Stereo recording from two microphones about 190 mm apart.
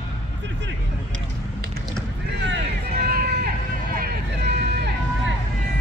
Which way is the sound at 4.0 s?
55° right (ahead or behind).